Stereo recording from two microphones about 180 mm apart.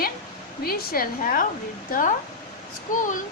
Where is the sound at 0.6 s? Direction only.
55° left (ahead or behind).